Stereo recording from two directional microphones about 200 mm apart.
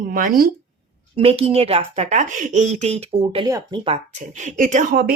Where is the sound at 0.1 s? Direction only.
45° right (ahead or behind).